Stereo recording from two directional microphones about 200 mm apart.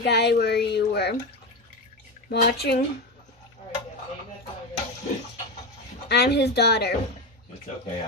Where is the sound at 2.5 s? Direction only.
55° left (ahead or behind).